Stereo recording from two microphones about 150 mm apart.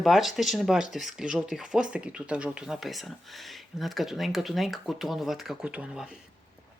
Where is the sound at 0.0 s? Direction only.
Centre (ahead or behind).